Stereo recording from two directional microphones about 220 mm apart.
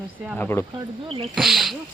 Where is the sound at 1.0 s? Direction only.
25° right (ahead or behind).